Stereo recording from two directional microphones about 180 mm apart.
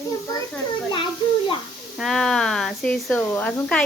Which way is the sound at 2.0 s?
Centre (ahead or behind).